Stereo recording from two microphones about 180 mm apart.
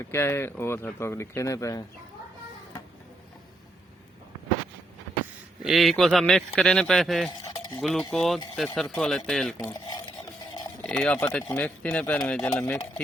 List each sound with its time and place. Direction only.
0.0 s speech: 15° left (ahead or behind)
5.6 s speech: centre (ahead or behind)
9.6 s stir: 20° left (ahead or behind)
10.8 s speech: 5° left (ahead or behind)